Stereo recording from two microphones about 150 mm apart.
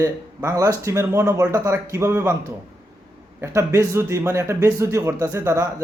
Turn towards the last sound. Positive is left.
turn(degrees=-20)  # may be behind; listen again after turning